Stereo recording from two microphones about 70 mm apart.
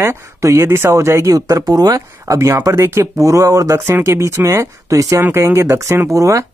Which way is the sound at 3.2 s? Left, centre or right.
Right.